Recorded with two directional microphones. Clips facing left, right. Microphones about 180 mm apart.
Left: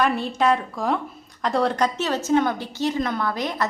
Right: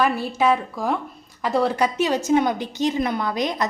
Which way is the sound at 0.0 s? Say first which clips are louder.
Right 1 dB; 5° right (ahead or behind).